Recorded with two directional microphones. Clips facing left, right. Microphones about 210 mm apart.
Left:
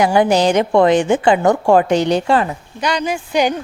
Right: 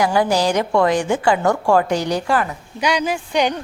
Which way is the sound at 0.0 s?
20° left (ahead or behind).